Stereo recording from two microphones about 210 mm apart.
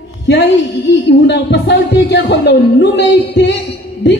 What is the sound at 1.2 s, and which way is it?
Speech, 55° left (ahead or behind).